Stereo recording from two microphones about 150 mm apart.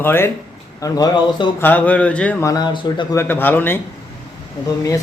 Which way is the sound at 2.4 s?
25° left (ahead or behind).